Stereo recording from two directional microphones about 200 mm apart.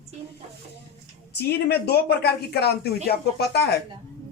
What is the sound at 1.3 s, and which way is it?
A man's voice, 55° left (ahead or behind).